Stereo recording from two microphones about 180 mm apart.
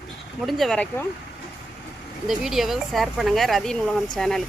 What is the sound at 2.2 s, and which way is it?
Speech, centre (ahead or behind).